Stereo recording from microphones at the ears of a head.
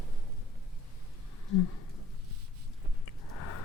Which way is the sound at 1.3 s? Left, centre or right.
Left.